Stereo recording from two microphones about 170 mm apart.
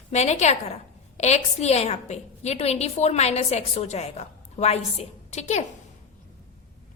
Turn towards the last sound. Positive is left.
turn(degrees=40)  # may be behind; listen again after turning